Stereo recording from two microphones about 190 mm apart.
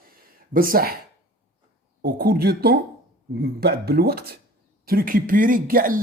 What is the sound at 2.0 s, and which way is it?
A man's voice, 55° right (ahead or behind).